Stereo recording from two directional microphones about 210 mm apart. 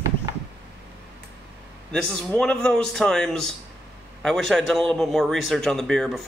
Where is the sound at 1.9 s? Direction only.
5° left (ahead or behind).